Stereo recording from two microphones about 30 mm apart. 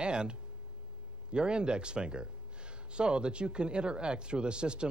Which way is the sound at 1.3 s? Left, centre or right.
Right.